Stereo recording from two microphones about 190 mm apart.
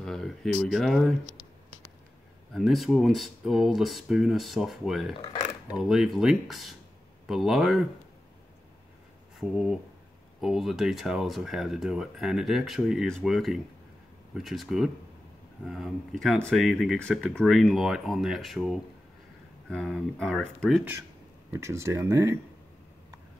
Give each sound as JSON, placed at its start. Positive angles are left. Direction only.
{"t": 0.0, "sound": "speech", "side_deg": 0}
{"t": 2.5, "sound": "speech", "side_deg": 0}
{"t": 5.1, "sound": "dishes", "side_deg": 30}
{"t": 5.7, "sound": "speech", "side_deg": 0}
{"t": 9.4, "sound": "speech", "side_deg": 0}
{"t": 21.5, "sound": "speech", "side_deg": -15}